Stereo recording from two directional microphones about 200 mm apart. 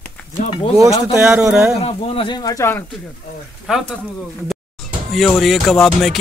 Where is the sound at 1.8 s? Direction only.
30° left (ahead or behind).